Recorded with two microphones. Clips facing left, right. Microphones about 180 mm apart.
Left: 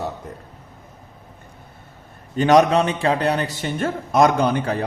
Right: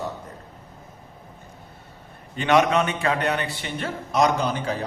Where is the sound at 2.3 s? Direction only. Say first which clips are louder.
Left 5 dB; 40° left (ahead or behind); by 4.7 s 60° left (ahead or behind).